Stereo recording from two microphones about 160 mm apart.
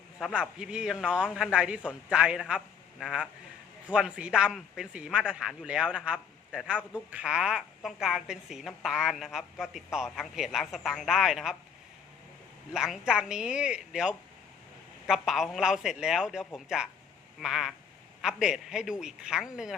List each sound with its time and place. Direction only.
0.3 s a woman's voice: 5° right (ahead or behind)
12.7 s a woman's voice: 5° right (ahead or behind)